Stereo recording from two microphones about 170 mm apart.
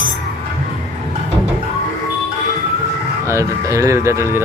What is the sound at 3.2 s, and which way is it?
Music, 15° right (ahead or behind).